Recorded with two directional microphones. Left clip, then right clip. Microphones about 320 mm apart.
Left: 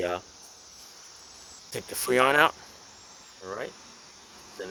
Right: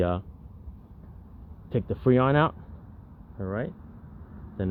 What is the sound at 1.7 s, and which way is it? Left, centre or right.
Speech, centre.